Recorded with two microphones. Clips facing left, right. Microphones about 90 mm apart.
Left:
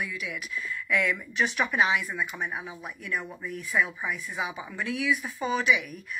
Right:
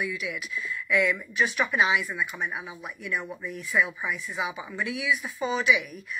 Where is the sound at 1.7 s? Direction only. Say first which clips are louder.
Right 1 dB; 40° left (ahead or behind).